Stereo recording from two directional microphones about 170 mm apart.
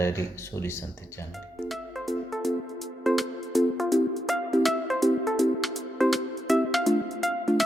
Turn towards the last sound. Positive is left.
turn(degrees=0)  # may be behind; listen again after turning